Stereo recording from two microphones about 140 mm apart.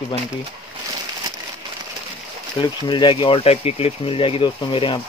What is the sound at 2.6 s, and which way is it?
Speech, 35° left (ahead or behind).